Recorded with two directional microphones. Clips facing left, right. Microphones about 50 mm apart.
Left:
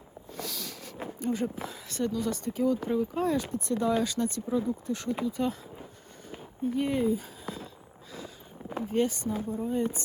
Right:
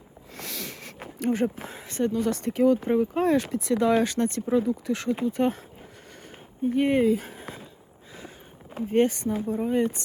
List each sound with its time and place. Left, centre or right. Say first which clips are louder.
0.3 s a sound: right 2 dB; right
1.5 s speech: right 3 dB; right
3.5 s speech: right 5 dB; right
3.9 s speech: right 5 dB; right
5.2 s speech: right 6 dB; right
6.3 s a sound: right 5 dB; right
8.9 s speech: right 6 dB; right